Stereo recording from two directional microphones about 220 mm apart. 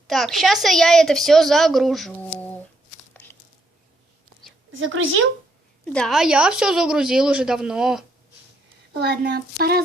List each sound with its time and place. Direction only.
0.1 s speech: centre (ahead or behind)
3.1 s a sound: 10° left (ahead or behind)
4.7 s speech: 60° right (ahead or behind)
5.8 s speech: 5° left (ahead or behind)
8.9 s a child's voice: 50° right (ahead or behind)